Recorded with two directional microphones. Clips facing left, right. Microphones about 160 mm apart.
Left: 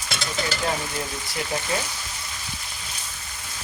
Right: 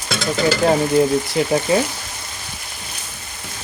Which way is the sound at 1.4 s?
25° right (ahead or behind).